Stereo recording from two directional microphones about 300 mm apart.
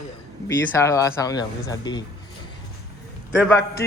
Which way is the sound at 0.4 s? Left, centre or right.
Centre.